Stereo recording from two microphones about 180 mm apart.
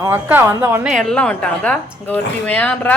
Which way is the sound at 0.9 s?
Centre (ahead or behind).